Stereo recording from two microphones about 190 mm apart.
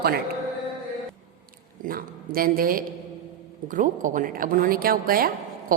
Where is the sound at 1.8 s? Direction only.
50° right (ahead or behind).